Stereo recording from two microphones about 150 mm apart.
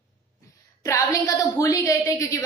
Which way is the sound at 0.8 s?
20° left (ahead or behind).